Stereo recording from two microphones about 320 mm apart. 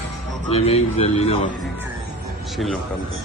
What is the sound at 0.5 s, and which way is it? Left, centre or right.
Speech, centre.